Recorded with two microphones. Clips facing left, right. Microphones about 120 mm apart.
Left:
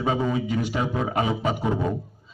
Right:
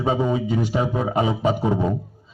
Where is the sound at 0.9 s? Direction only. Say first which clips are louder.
Right 3 dB; 20° right (ahead or behind).